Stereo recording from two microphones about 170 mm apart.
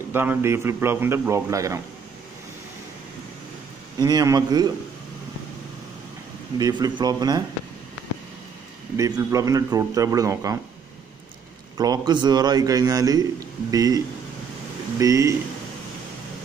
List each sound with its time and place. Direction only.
0.1 s a man's voice: 15° right (ahead or behind)
4.0 s a man's voice: 20° right (ahead or behind)
6.6 s a man's voice: 25° right (ahead or behind)
8.9 s a man's voice: 20° right (ahead or behind)
11.7 s a man's voice: 25° right (ahead or behind)